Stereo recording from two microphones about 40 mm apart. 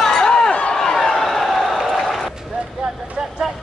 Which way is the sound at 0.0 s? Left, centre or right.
Centre.